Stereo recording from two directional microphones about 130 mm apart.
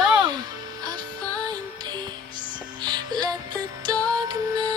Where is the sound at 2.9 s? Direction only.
35° right (ahead or behind).